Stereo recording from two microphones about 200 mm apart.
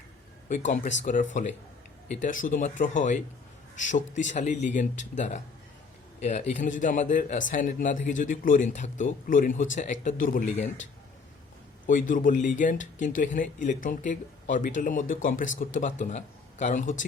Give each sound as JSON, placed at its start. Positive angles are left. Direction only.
{"t": 0.4, "sound": "speech", "side_deg": 35}
{"t": 11.9, "sound": "speech", "side_deg": 40}